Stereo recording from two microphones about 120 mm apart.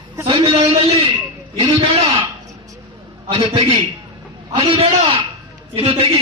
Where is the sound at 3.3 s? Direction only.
50° right (ahead or behind).